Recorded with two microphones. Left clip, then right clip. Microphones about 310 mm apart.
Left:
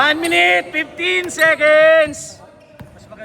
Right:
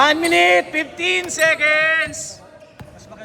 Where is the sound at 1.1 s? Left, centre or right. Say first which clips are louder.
Left 3 dB; centre.